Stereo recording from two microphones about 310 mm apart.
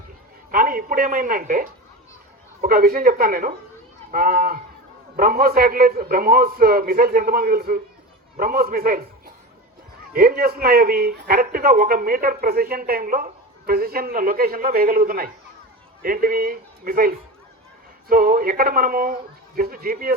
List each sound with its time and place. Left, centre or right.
0.5 s a man's voice: right